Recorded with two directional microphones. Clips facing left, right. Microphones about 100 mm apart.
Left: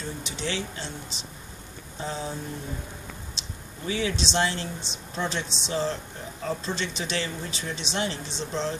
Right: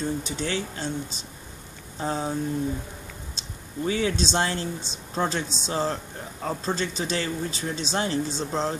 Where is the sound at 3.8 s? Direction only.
45° right (ahead or behind).